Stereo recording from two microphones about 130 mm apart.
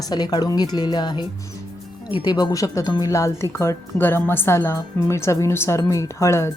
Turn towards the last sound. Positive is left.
turn(degrees=20)  # may be behind; listen again after turning